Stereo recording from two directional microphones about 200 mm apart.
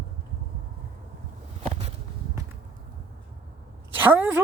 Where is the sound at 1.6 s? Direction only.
35° right (ahead or behind).